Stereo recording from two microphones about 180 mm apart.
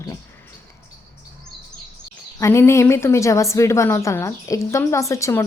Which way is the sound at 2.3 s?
15° left (ahead or behind).